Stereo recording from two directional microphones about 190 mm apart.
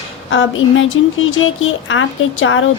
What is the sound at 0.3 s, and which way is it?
A woman's voice, 90° left.